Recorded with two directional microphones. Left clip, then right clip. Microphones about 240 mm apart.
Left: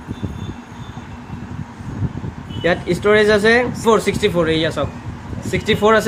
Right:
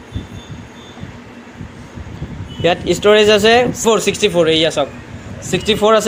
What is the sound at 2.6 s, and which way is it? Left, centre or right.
Speech, centre.